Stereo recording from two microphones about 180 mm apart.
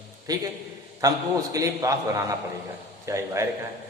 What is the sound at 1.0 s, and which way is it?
A man's voice, 20° right (ahead or behind).